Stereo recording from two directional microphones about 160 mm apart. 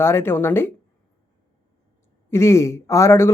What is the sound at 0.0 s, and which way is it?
Speech, 15° left (ahead or behind).